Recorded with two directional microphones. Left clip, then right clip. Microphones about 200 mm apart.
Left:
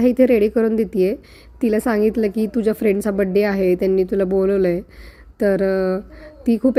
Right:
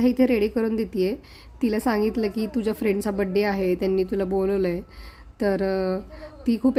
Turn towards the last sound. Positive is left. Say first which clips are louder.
# left 5 dB
turn(degrees=15)  # may be behind; listen again after turning